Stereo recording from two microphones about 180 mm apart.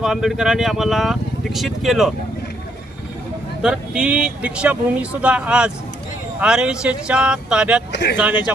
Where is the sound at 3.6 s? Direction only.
5° right (ahead or behind).